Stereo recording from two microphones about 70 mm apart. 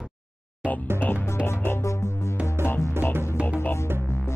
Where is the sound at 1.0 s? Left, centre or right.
Left.